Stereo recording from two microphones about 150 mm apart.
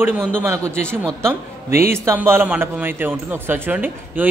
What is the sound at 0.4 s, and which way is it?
A man's voice, 15° right (ahead or behind).